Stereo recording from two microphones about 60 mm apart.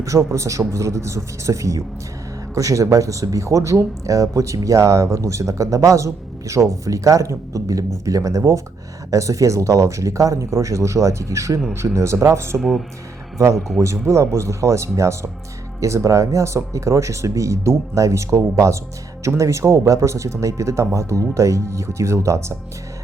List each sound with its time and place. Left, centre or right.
0.0 s speech: right
12.5 s speech: centre
13.4 s speech: right